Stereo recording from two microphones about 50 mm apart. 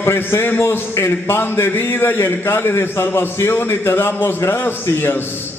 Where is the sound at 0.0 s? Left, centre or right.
Left.